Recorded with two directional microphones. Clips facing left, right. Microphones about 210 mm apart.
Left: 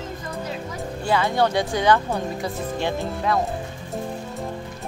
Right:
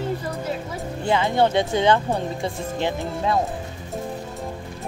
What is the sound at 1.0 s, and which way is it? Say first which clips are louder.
Speech: right 1 dB; 20° right (ahead or behind).